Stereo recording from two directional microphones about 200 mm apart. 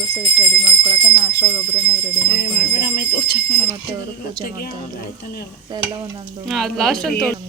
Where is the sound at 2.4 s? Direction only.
50° left (ahead or behind).